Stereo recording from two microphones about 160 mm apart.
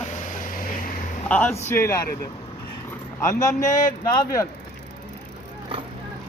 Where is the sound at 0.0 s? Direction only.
55° left (ahead or behind).